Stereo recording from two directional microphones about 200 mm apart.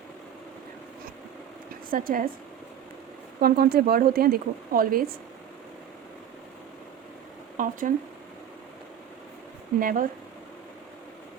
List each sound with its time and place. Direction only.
1.9 s speech: 45° right (ahead or behind)
3.4 s speech: 50° right (ahead or behind)
7.5 s speech: 40° right (ahead or behind)
9.8 s speech: 40° right (ahead or behind)